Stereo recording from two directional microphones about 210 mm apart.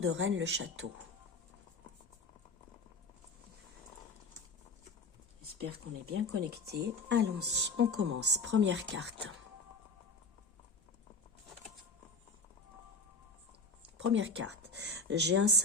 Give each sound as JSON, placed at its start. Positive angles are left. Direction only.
{"t": 0.0, "sound": "speech", "side_deg": -70}
{"t": 5.6, "sound": "speech", "side_deg": -90}
{"t": 6.4, "sound": "speech", "side_deg": -50}
{"t": 7.9, "sound": "speech", "side_deg": -90}
{"t": 8.2, "sound": "speech", "side_deg": -55}
{"t": 14.0, "sound": "speech", "side_deg": -60}